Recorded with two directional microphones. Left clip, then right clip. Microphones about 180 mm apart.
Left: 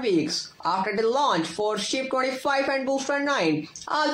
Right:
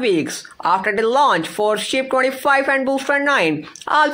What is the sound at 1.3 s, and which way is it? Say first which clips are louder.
Speech: right 8 dB; 10° right (ahead or behind).